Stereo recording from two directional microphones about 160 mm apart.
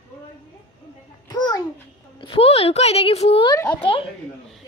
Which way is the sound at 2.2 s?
35° left (ahead or behind).